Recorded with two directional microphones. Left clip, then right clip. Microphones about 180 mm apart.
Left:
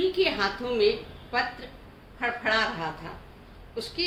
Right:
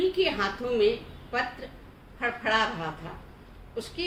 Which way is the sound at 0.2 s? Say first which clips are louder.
Left 1 dB; 15° left (ahead or behind).